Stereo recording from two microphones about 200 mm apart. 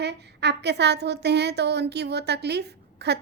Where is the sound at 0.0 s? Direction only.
55° right (ahead or behind).